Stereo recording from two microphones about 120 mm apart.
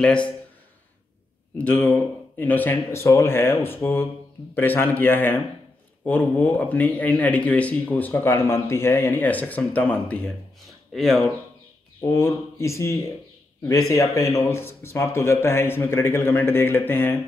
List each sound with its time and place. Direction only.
1.6 s speech: 10° left (ahead or behind)
10.9 s speech: centre (ahead or behind)
12.0 s a man's voice: 20° left (ahead or behind)